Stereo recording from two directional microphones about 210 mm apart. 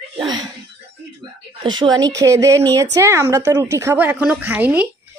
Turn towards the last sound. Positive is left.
turn(degrees=-5)  # may be behind; listen again after turning